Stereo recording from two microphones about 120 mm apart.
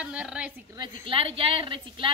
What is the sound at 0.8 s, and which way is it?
A woman's voice, 50° right (ahead or behind).